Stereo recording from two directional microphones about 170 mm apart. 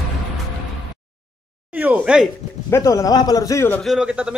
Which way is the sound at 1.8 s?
5° right (ahead or behind).